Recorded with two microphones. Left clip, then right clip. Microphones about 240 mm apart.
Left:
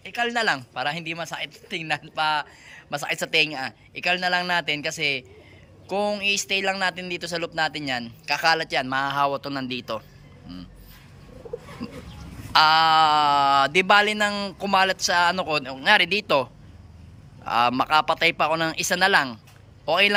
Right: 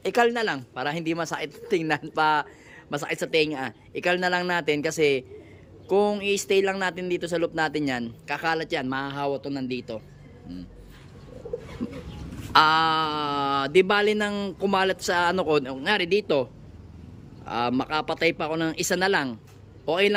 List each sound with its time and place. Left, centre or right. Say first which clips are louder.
0.0 s speech: right 5 dB; right
0.3 s speech: left 2 dB; centre
12.5 s a man's voice: left 3 dB; centre